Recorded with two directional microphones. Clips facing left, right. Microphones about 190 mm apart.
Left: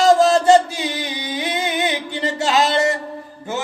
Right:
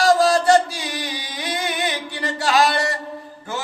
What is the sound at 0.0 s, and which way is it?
Chant, 25° left (ahead or behind).